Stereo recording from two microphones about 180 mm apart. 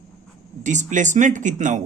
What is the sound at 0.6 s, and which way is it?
Speech, 40° right (ahead or behind).